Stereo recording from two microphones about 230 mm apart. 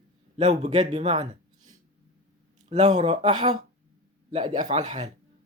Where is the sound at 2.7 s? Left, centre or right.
Right.